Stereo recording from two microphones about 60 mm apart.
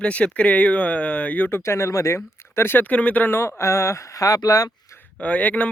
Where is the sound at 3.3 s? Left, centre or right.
Left.